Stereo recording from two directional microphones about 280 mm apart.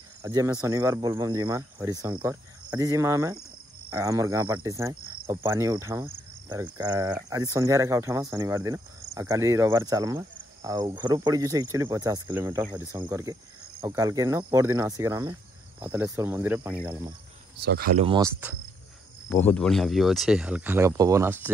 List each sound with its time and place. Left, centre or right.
0.2 s speech: centre
17.6 s speech: right
17.9 s speech: centre
19.2 s speech: centre